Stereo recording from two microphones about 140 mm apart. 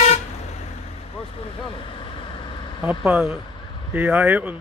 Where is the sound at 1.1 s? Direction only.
40° left (ahead or behind).